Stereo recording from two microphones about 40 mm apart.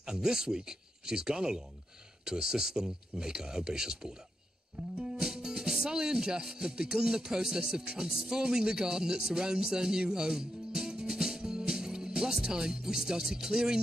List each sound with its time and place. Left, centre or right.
0.0 s speech: centre